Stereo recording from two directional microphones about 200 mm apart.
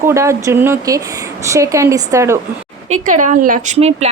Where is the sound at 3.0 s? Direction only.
40° right (ahead or behind).